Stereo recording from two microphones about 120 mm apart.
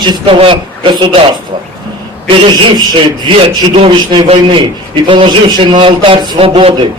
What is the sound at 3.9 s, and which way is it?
A man's voice, 40° right (ahead or behind).